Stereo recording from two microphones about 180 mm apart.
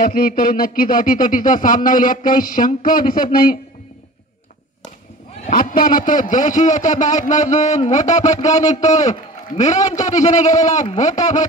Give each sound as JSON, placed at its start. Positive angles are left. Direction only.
{"t": 0.0, "sound": "a man's voice", "side_deg": 50}
{"t": 5.5, "sound": "a man's voice", "side_deg": 50}